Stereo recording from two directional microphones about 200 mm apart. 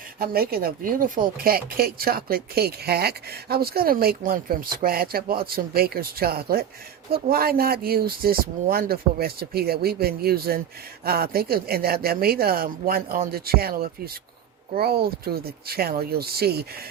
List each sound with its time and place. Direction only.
0.2 s speech: 50° right (ahead or behind)